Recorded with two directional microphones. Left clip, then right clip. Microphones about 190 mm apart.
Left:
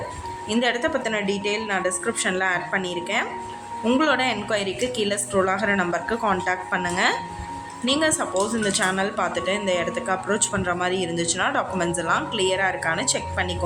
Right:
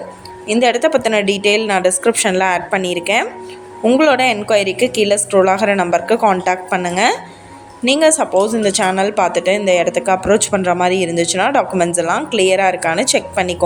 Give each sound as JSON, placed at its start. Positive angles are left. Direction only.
{"t": 0.4, "sound": "a woman's voice", "side_deg": -35}